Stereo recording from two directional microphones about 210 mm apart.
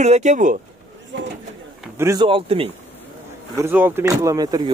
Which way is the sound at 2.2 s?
25° right (ahead or behind).